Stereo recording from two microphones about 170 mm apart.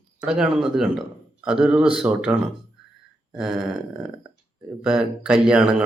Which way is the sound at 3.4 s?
Centre (ahead or behind).